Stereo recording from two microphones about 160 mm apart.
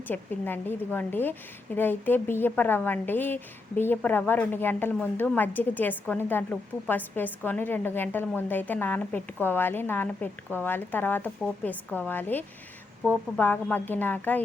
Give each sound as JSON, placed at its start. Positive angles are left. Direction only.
{"t": 0.1, "sound": "a woman's voice", "side_deg": 10}